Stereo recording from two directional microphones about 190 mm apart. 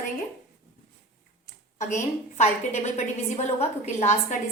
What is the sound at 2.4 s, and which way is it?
A woman's voice, 35° left (ahead or behind).